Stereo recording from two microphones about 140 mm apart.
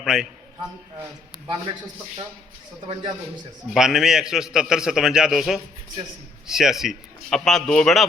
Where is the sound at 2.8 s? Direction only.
30° right (ahead or behind).